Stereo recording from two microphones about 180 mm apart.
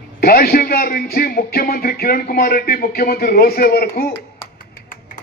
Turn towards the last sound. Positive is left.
turn(degrees=55)  # may be behind; listen again after turning